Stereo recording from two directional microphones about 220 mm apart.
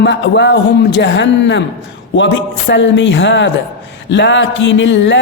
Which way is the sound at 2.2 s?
55° left (ahead or behind).